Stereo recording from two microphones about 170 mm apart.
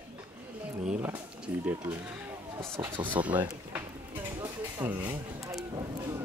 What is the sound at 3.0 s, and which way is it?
Speech, 10° right (ahead or behind).